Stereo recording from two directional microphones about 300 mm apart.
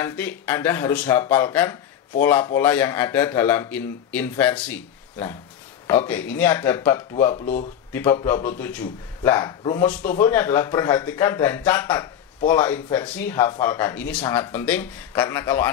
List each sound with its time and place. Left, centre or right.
0.0 s speech: centre
7.3 s speech: left
7.9 s speech: centre